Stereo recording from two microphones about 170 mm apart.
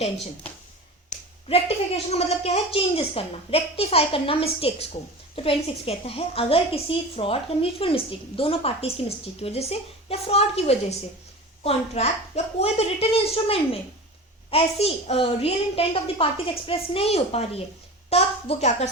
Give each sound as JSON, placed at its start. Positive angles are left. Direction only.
{"t": 1.5, "sound": "a woman's voice", "side_deg": 35}